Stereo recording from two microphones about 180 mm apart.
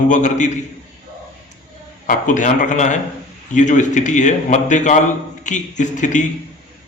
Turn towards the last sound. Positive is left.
turn(degrees=45)  # may be behind; listen again after turning